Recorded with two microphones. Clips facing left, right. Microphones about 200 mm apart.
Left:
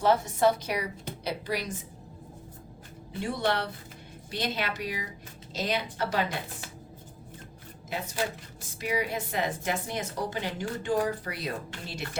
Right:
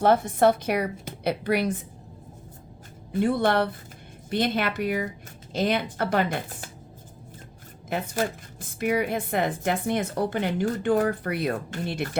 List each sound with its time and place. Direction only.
0.0 s speech: 55° right (ahead or behind)
3.1 s speech: 55° right (ahead or behind)
7.9 s speech: 55° right (ahead or behind)